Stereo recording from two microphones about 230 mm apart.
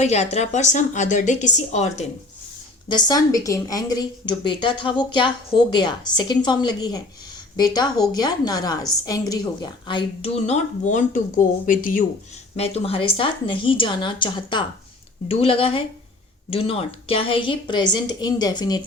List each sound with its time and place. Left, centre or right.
0.0 s a woman's voice: left
2.9 s a woman's voice: centre; by 12.0 s left
12.5 s a woman's voice: left